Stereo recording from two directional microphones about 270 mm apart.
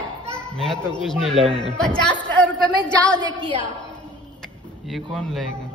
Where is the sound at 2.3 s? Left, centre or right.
Centre.